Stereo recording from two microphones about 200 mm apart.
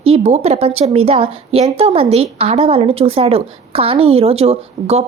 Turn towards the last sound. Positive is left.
turn(degrees=-30)  # may be behind; listen again after turning